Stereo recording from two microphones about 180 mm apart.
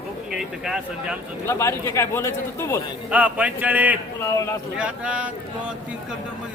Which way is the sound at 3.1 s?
5° right (ahead or behind).